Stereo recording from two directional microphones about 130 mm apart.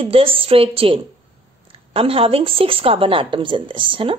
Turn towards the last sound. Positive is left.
turn(degrees=-40)  # may be behind; listen again after turning